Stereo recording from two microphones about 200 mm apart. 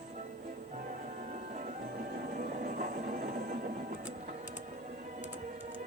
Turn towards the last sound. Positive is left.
turn(degrees=-40)  # may be behind; listen again after turning